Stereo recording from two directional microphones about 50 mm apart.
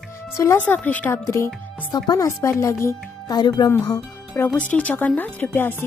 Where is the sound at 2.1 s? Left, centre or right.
Left.